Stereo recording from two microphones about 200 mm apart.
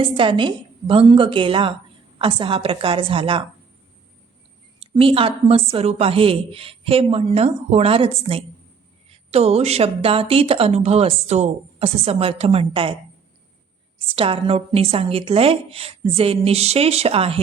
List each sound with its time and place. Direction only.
0.0 s a woman's voice: 25° right (ahead or behind)
4.8 s a woman's voice: 25° right (ahead or behind)
14.2 s a woman's voice: 30° right (ahead or behind)